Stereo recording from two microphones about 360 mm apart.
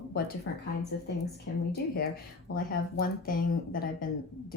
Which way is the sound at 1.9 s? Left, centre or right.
Left.